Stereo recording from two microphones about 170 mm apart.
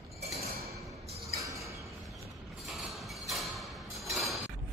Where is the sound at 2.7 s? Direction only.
Centre (ahead or behind).